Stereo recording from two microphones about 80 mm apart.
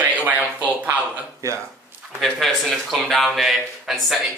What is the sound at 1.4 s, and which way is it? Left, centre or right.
Speech, right.